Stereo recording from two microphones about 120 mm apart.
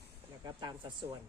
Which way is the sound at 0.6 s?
40° right (ahead or behind).